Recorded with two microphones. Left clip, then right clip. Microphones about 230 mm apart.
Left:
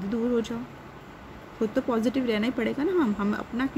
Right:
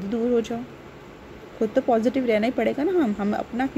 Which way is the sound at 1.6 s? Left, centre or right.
Centre.